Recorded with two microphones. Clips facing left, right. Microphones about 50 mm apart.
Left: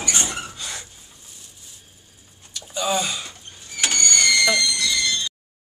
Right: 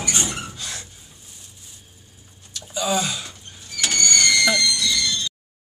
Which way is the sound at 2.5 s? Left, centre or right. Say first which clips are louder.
Even; centre.